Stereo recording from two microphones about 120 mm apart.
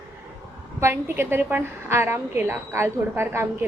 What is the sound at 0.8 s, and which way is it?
A woman's voice, 20° right (ahead or behind).